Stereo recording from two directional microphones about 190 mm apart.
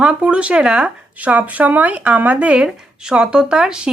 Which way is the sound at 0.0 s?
5° right (ahead or behind).